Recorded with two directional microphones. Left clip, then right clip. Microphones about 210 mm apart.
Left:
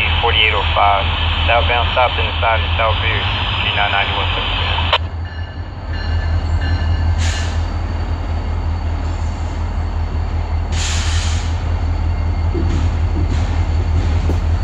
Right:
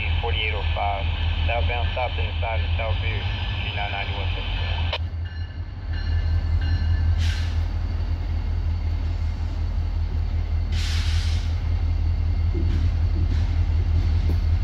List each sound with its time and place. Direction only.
0.0 s speech: 20° right (ahead or behind)